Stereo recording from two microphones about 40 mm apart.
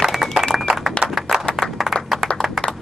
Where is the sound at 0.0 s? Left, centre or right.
Centre.